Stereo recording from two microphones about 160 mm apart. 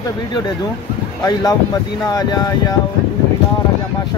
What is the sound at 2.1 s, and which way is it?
Speech, 25° left (ahead or behind).